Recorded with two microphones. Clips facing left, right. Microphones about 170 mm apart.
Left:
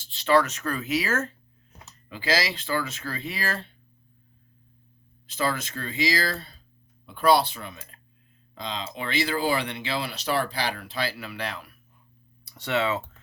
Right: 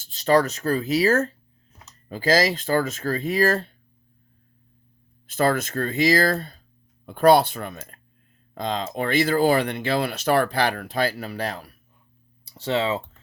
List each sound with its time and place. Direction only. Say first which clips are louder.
0.0 s speech: right 3 dB; 45° right (ahead or behind)
5.2 s speech: right 6 dB; 50° right (ahead or behind)
12.5 s speech: right 2 dB; 30° right (ahead or behind)